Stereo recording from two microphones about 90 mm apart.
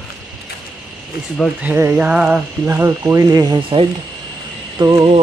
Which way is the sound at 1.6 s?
25° right (ahead or behind).